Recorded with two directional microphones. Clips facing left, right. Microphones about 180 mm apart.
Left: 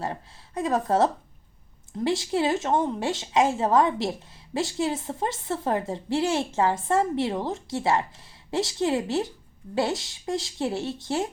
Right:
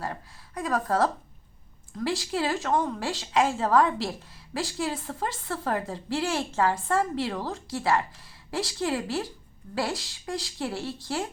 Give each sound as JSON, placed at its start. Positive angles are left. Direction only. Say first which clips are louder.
{"t": 0.0, "sound": "a woman's voice", "louder": "left 3 dB", "side_deg": 25}